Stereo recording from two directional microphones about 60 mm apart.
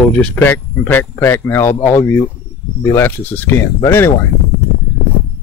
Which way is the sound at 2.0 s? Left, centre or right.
Left.